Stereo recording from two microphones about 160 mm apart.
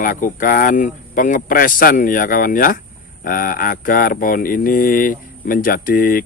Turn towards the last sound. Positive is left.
turn(degrees=65)  # may be behind; listen again after turning